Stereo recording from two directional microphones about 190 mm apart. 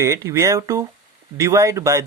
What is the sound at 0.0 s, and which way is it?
Speech, 15° right (ahead or behind).